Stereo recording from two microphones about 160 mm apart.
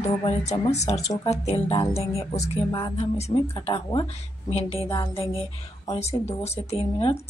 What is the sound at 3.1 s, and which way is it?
Speech, 40° left (ahead or behind).